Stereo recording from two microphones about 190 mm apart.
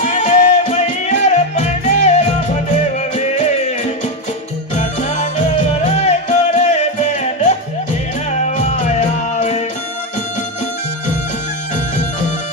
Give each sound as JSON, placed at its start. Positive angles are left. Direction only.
{"t": 0.0, "sound": "music", "side_deg": 40}
{"t": 8.3, "sound": "music", "side_deg": 40}